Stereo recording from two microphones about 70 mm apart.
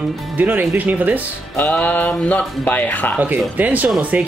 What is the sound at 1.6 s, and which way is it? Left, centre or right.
Speech, left.